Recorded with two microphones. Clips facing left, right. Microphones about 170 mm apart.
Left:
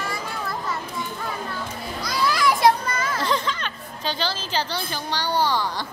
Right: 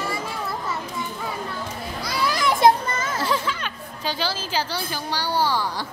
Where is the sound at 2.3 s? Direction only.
25° right (ahead or behind).